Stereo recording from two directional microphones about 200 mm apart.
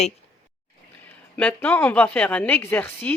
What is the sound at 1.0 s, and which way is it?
A woman's voice, 10° left (ahead or behind).